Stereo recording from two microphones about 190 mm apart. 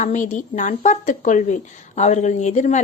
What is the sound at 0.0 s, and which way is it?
A woman's voice, 40° left (ahead or behind).